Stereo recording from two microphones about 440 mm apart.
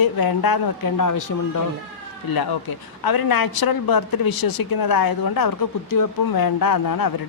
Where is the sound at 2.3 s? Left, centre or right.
Left.